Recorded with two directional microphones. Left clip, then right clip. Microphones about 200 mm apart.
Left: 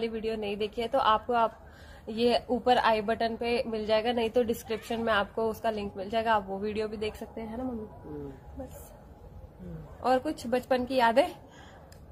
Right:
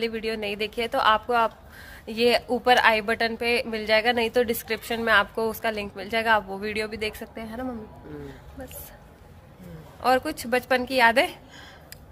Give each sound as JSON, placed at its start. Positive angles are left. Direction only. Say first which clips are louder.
{"t": 0.0, "sound": "a woman's voice", "louder": "right 4 dB", "side_deg": -10}
{"t": 10.0, "sound": "a woman's voice", "louder": "right 5 dB", "side_deg": -10}